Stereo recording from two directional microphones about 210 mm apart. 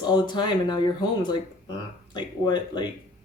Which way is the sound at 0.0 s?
20° left (ahead or behind).